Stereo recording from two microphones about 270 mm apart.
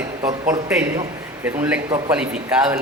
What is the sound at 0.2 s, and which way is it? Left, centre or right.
A man's voice, centre.